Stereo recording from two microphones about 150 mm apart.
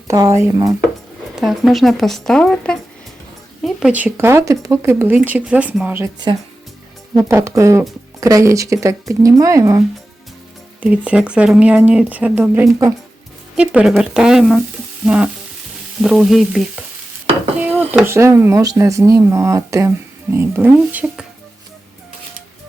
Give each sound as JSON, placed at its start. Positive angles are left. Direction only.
{"t": 0.1, "sound": "speech", "side_deg": -20}
{"t": 1.4, "sound": "speech", "side_deg": 0}
{"t": 7.2, "sound": "speech", "side_deg": -20}
{"t": 10.8, "sound": "speech", "side_deg": -10}